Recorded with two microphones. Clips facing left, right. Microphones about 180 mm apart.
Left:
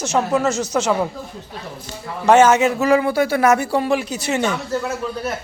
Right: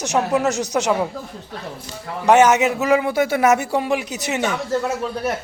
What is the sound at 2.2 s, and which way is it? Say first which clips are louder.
A man's voice: left 1 dB; 15° right (ahead or behind).